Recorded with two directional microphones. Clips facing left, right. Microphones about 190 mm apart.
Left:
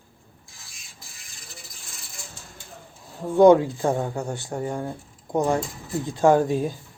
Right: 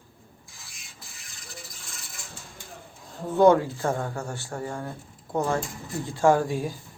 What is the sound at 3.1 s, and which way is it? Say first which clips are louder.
Speech: left 4 dB; 10° left (ahead or behind).